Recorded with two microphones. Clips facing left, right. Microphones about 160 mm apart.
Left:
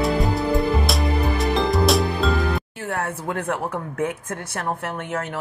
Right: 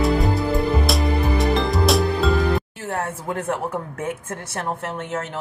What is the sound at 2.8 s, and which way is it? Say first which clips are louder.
A woman's voice: even; 25° right (ahead or behind).